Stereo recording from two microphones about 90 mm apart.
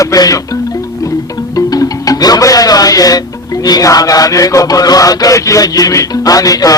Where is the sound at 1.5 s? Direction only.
40° left (ahead or behind).